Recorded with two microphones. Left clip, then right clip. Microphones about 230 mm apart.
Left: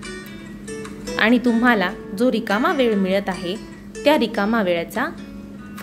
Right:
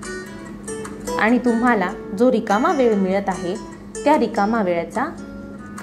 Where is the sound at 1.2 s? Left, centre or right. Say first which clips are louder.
Left 1 dB; centre.